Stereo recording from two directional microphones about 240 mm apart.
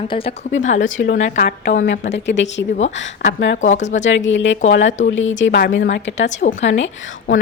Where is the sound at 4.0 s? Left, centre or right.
Left.